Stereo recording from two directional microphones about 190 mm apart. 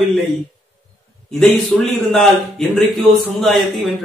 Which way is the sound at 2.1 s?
Centre (ahead or behind).